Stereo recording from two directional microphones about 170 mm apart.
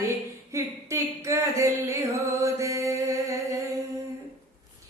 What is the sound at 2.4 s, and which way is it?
Mantra, 15° right (ahead or behind).